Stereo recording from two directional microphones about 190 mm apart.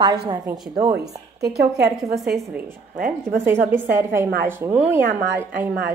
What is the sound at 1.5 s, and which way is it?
Speech, 60° right (ahead or behind).